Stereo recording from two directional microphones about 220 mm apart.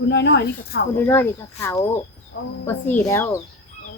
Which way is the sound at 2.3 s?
55° left (ahead or behind).